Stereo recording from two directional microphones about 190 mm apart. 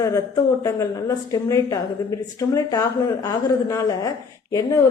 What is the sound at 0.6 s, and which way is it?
A woman's voice, 15° left (ahead or behind).